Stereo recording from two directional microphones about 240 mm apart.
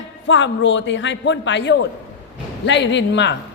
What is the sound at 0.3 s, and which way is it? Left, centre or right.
A man's voice, left.